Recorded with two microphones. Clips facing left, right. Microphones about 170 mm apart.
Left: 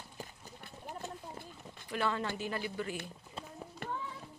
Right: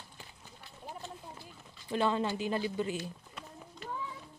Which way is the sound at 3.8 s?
55° left (ahead or behind).